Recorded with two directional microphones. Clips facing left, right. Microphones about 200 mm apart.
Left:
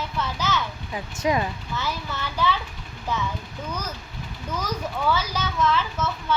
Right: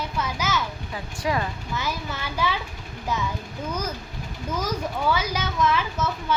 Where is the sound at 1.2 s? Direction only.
20° left (ahead or behind).